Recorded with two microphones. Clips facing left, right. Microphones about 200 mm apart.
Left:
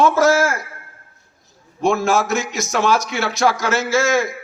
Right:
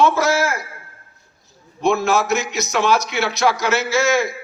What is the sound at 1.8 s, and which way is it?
A man's voice, 45° left (ahead or behind).